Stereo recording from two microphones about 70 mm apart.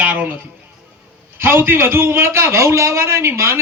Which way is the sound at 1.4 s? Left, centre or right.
Right.